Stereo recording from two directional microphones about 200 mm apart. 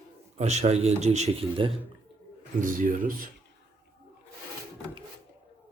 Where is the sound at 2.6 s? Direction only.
40° right (ahead or behind).